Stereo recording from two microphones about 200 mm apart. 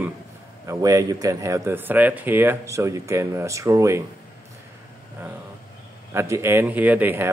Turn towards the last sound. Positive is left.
turn(degrees=-10)  # may be behind; listen again after turning